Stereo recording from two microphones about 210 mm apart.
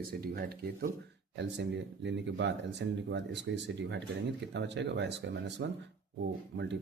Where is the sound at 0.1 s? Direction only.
45° right (ahead or behind).